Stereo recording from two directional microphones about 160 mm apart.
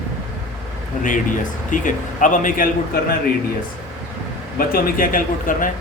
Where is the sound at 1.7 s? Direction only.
55° left (ahead or behind).